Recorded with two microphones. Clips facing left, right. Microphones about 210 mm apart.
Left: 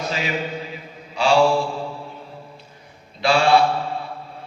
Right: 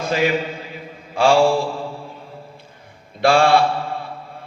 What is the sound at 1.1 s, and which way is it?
Mantra, 50° right (ahead or behind).